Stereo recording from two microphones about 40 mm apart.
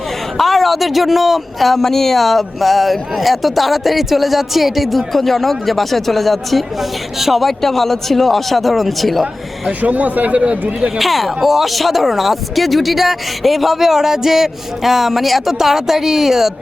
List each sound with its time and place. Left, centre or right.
0.3 s speech: centre
9.8 s speech: right
10.9 s speech: centre